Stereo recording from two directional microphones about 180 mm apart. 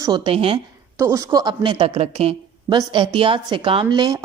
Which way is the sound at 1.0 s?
15° right (ahead or behind).